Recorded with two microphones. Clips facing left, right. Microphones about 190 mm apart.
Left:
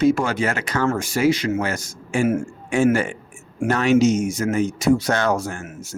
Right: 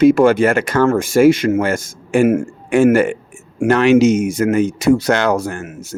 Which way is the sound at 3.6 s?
75° right (ahead or behind).